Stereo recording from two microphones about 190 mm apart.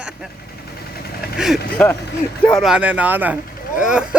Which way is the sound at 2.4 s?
Centre (ahead or behind).